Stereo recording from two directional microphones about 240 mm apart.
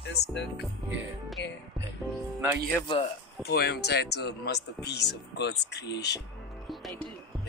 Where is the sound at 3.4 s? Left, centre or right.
Left.